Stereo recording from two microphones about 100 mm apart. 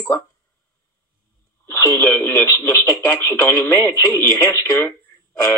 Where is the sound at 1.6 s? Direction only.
25° left (ahead or behind).